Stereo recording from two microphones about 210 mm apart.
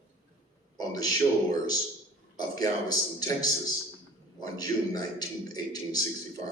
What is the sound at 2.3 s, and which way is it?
A man's voice, 15° left (ahead or behind).